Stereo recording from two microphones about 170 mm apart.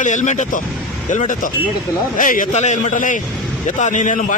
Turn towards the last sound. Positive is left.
turn(degrees=50)  # may be behind; listen again after turning